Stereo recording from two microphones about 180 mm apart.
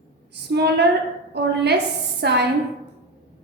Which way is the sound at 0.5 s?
65° right (ahead or behind).